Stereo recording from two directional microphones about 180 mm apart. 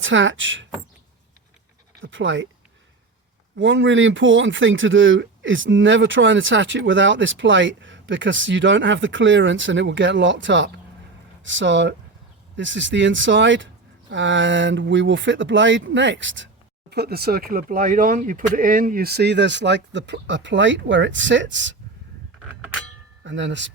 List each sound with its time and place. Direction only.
0.0 s speech: 90° right
2.0 s speech: 90° right
3.5 s speech: 85° right
16.9 s speech: 60° right (ahead or behind); by 21.8 s 90° right
23.2 s speech: 90° right